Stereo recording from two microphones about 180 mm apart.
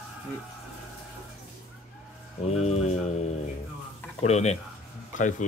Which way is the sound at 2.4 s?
40° left (ahead or behind).